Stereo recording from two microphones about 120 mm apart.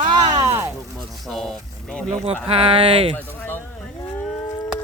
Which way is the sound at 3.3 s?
15° left (ahead or behind).